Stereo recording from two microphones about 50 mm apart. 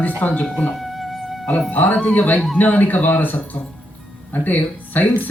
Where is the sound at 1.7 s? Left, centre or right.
Left.